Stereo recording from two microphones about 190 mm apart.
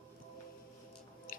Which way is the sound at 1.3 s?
45° left (ahead or behind).